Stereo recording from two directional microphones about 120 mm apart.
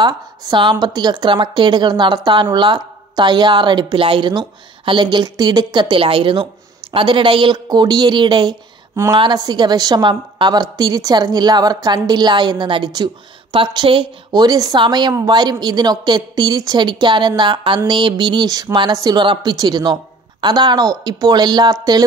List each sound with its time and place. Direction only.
0.0 s a woman's voice: 40° right (ahead or behind)